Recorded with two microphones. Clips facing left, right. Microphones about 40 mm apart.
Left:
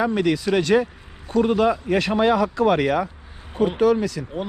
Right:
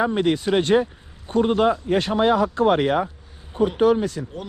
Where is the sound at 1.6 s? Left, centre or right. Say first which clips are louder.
Even; left.